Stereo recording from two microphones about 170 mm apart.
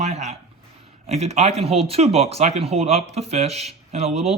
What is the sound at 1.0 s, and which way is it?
Speech, 40° right (ahead or behind).